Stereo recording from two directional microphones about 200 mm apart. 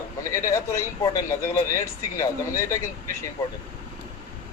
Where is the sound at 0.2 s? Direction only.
15° left (ahead or behind).